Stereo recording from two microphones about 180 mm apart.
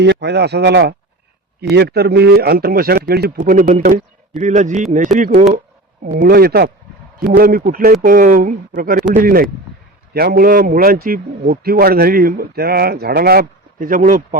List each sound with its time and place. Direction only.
0.0 s a man's voice: 70° right (ahead or behind); by 5.5 s 45° right (ahead or behind)
6.1 s a man's voice: 60° right (ahead or behind)